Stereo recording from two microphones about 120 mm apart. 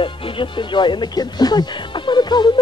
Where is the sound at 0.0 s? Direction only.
45° left (ahead or behind).